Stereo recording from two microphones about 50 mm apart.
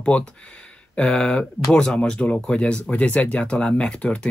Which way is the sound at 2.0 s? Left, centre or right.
Left.